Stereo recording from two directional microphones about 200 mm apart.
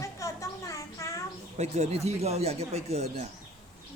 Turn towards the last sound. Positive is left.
turn(degrees=-30)  # may be behind; listen again after turning